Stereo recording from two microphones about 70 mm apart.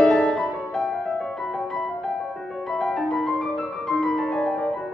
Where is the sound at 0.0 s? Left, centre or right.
Centre.